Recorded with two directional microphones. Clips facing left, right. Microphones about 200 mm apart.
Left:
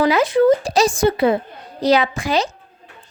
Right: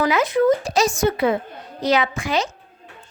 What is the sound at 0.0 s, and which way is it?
Speech, 30° left (ahead or behind).